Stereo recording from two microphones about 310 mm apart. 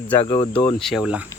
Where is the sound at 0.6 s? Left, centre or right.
Centre.